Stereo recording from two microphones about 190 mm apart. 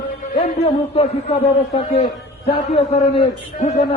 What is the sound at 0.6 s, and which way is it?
Speech, 35° left (ahead or behind).